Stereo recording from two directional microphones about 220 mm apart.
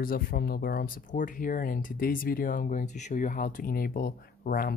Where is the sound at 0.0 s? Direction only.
40° left (ahead or behind).